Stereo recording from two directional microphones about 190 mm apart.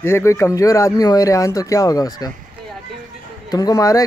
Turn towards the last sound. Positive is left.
turn(degrees=20)  # may be behind; listen again after turning